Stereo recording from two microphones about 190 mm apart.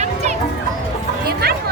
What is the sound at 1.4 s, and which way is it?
Chatter, 55° right (ahead or behind).